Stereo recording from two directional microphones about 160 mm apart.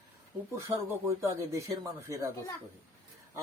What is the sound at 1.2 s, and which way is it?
Speech, 15° right (ahead or behind).